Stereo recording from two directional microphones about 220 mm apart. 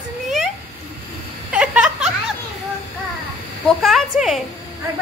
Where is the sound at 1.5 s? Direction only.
5° right (ahead or behind).